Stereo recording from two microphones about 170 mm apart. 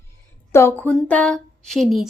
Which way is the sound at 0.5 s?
15° left (ahead or behind).